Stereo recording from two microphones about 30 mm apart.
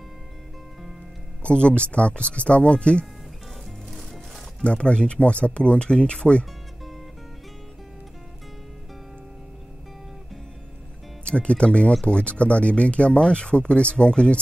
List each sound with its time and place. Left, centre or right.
1.4 s speech: left
4.6 s speech: left
11.2 s speech: left